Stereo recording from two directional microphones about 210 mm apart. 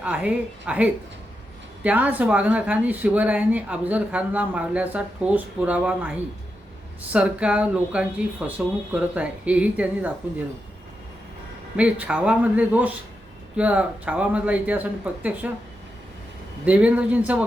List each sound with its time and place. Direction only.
0.0 s speech: 5° right (ahead or behind)
11.8 s speech: 5° right (ahead or behind)
16.6 s speech: 5° right (ahead or behind)